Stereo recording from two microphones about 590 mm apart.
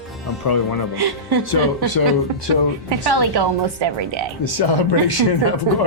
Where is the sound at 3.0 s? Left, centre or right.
Right.